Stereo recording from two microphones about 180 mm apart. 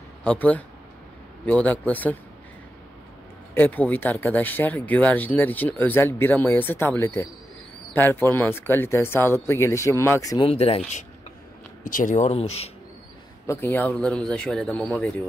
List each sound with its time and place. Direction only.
0.2 s speech: 10° left (ahead or behind)
3.5 s speech: 10° left (ahead or behind)
10.5 s speech: 35° left (ahead or behind)
11.8 s speech: 50° left (ahead or behind)
13.5 s speech: 10° left (ahead or behind)